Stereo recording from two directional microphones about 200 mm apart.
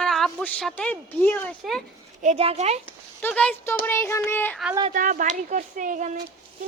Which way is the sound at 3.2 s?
5° left (ahead or behind).